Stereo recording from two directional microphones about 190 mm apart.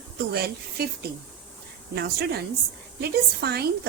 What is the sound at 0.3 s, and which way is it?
Speech, 55° right (ahead or behind).